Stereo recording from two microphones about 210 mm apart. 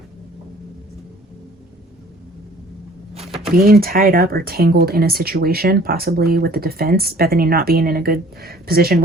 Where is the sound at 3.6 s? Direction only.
45° right (ahead or behind).